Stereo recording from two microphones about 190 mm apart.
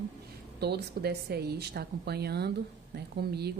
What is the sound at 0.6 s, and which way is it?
Speech, 60° right (ahead or behind).